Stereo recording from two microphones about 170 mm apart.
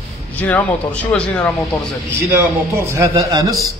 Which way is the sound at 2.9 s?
20° right (ahead or behind).